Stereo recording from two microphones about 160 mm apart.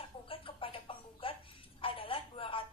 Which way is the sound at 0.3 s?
35° left (ahead or behind).